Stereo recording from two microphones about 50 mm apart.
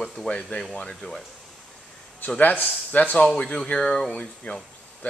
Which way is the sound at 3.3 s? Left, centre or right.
Centre.